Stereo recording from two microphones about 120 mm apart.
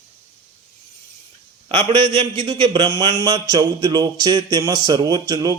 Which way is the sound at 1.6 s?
40° right (ahead or behind).